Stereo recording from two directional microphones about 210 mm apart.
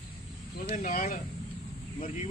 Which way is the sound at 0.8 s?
40° left (ahead or behind).